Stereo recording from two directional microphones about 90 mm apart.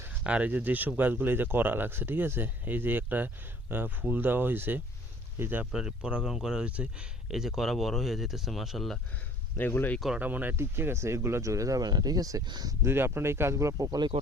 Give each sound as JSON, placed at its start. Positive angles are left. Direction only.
{"t": 0.1, "sound": "speech", "side_deg": -15}
{"t": 5.7, "sound": "speech", "side_deg": -10}
{"t": 9.6, "sound": "speech", "side_deg": 20}
{"t": 10.2, "sound": "speech", "side_deg": -20}
{"t": 12.8, "sound": "speech", "side_deg": -25}